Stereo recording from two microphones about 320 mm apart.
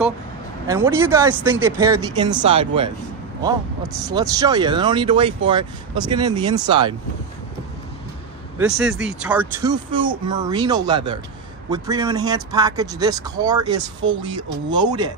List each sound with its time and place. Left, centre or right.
0.7 s speech: centre
8.6 s speech: centre